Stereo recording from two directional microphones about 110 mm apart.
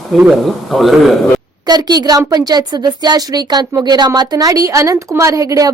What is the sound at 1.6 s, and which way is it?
A woman's voice, 40° right (ahead or behind).